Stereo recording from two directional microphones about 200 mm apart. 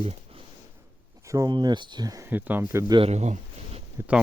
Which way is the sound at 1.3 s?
20° right (ahead or behind).